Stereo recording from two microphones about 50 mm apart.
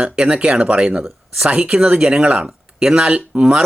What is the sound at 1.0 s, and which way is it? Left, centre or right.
Speech, centre.